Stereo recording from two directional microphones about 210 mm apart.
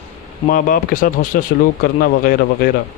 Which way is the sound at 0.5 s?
40° left (ahead or behind).